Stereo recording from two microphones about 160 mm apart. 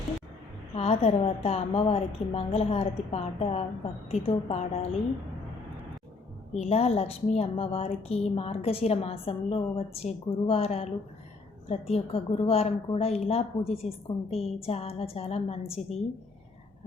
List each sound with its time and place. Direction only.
0.8 s a woman's voice: 40° left (ahead or behind)
6.5 s a woman's voice: 40° left (ahead or behind)